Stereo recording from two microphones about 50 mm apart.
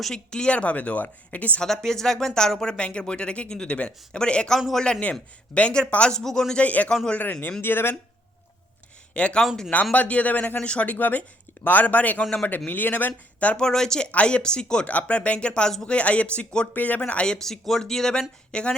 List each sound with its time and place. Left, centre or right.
0.0 s a woman's voice: centre; by 1.6 s left
1.6 s a woman's voice: centre
6.6 s a woman's voice: left
7.6 s speech: left
9.1 s a woman's voice: left
13.6 s speech: centre
14.8 s a woman's voice: left
16.7 s speech: left
17.0 s a woman's voice: left
17.3 s speech: centre